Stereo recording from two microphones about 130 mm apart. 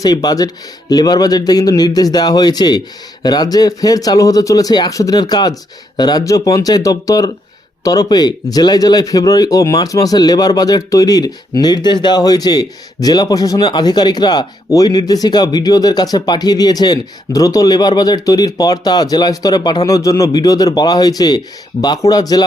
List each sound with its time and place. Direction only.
0.0 s speech: 30° left (ahead or behind)